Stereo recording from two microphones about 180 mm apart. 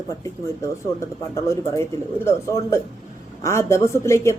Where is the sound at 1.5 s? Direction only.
15° left (ahead or behind).